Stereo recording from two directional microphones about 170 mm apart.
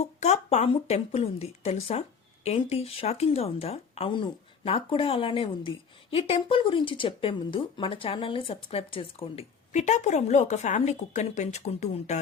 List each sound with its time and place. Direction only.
0.0 s speech: 40° left (ahead or behind)